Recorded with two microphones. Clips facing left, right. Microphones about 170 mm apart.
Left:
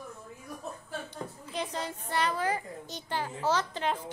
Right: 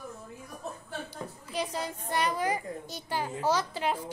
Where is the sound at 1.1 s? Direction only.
10° right (ahead or behind).